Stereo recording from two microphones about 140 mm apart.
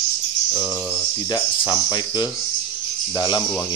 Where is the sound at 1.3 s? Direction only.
30° left (ahead or behind).